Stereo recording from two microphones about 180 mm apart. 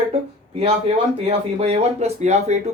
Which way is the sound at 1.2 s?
35° right (ahead or behind).